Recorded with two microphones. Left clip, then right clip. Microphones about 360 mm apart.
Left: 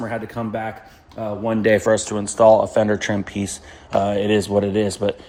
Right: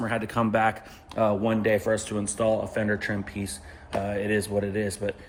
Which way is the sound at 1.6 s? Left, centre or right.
Left.